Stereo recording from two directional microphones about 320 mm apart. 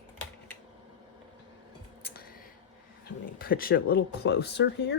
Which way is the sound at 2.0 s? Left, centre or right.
Left.